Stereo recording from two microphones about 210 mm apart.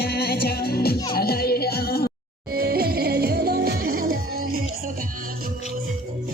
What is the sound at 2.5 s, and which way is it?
Music, 45° right (ahead or behind).